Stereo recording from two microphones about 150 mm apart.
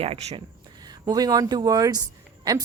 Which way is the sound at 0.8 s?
25° right (ahead or behind).